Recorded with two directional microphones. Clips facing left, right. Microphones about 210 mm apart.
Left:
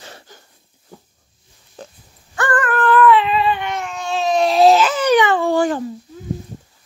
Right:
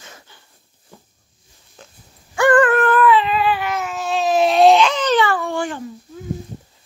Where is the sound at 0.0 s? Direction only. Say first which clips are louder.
Left 4 dB; 35° left (ahead or behind).